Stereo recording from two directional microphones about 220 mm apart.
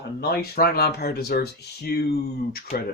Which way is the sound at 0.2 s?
45° left (ahead or behind).